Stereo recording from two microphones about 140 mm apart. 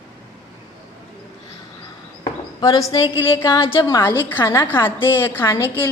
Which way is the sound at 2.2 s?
25° left (ahead or behind).